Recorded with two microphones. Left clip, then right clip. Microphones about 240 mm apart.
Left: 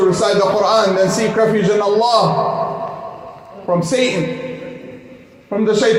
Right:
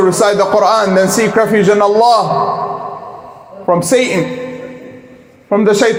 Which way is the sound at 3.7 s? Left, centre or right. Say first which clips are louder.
Right 5 dB; right.